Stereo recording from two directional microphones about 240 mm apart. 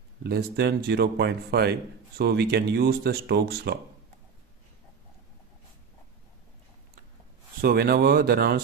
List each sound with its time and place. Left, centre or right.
0.2 s a man's voice: right
7.6 s a man's voice: right